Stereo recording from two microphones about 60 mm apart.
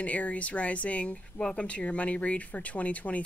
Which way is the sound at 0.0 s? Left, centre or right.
Left.